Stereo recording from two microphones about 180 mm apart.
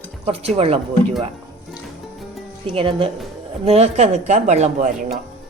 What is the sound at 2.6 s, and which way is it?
Speech, 30° right (ahead or behind).